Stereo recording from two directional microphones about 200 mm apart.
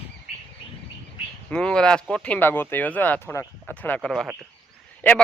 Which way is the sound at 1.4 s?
5° left (ahead or behind).